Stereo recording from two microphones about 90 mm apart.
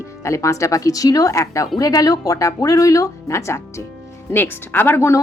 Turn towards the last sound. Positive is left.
turn(degrees=30)  # may be behind; listen again after turning